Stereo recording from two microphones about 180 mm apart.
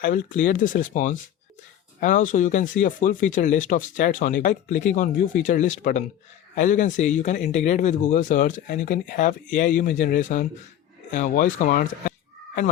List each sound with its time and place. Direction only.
0.0 s speech: 50° left (ahead or behind)